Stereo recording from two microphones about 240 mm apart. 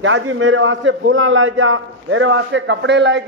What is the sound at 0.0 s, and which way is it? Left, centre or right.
A man's voice, right.